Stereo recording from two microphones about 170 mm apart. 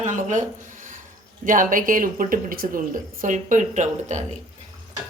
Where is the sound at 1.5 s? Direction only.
50° right (ahead or behind).